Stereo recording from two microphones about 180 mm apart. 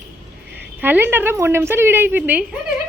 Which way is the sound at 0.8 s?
10° right (ahead or behind).